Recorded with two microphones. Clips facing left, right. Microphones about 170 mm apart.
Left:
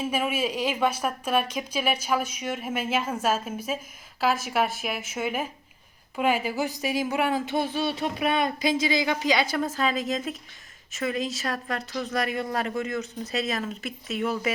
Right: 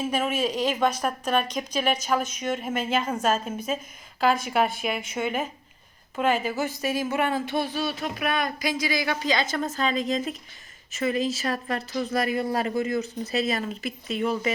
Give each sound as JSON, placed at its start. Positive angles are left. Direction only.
{"t": 0.1, "sound": "a woman's voice", "side_deg": 10}